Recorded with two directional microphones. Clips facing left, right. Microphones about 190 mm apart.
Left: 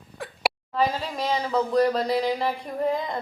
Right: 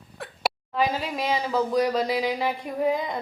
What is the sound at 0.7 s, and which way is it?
A woman's voice, 5° right (ahead or behind).